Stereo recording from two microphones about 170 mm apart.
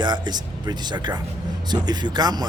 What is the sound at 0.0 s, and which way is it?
Speech, 25° right (ahead or behind).